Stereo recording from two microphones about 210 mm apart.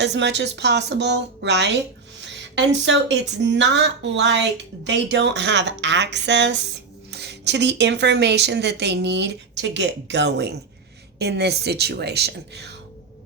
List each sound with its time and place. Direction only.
0.0 s a woman's voice: 55° right (ahead or behind)